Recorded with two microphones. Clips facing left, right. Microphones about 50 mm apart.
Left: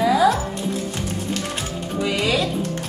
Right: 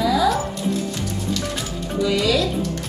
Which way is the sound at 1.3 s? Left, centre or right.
Left.